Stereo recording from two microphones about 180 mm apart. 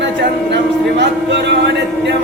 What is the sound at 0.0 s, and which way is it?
Music, 70° right (ahead or behind).